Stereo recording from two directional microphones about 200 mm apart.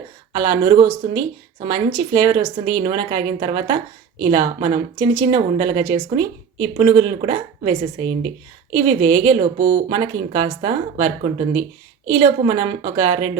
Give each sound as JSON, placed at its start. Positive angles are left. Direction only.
{"t": 0.3, "sound": "speech", "side_deg": -25}